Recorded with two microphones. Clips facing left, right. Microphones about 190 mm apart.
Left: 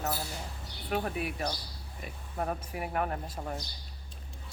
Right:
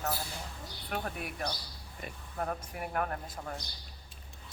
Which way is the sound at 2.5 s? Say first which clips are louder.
Left 2 dB; 5° left (ahead or behind).